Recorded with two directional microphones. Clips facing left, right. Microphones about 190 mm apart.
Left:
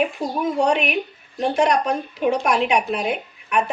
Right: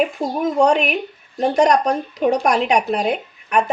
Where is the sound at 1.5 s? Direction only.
40° right (ahead or behind).